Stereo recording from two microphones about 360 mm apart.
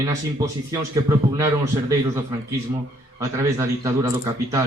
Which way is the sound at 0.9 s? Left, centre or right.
Centre.